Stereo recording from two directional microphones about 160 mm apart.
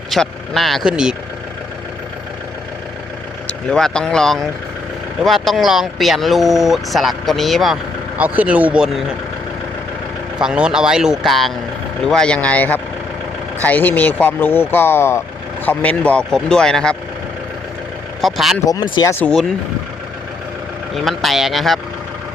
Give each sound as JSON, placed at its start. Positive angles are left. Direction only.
{"t": 0.1, "sound": "speech", "side_deg": 0}
{"t": 3.7, "sound": "speech", "side_deg": 5}
{"t": 10.3, "sound": "speech", "side_deg": -5}
{"t": 18.2, "sound": "speech", "side_deg": 0}
{"t": 18.6, "sound": "speech", "side_deg": 25}
{"t": 19.2, "sound": "speech", "side_deg": 5}
{"t": 20.9, "sound": "speech", "side_deg": 0}